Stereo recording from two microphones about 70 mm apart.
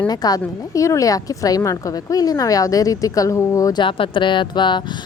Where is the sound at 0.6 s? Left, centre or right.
Left.